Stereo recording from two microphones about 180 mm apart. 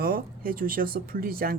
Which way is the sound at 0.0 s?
55° right (ahead or behind).